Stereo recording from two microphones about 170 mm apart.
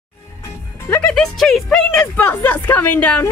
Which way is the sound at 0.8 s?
10° left (ahead or behind).